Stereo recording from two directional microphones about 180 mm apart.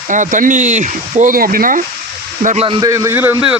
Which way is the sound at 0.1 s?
45° right (ahead or behind).